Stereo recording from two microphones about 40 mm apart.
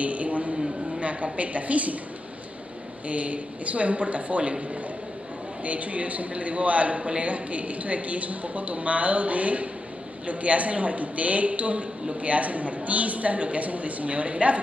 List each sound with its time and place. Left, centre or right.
0.0 s a sound: right
0.9 s a man's voice: right
3.1 s a man's voice: right